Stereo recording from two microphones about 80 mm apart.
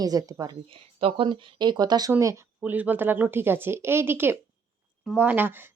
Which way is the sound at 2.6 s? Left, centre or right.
Right.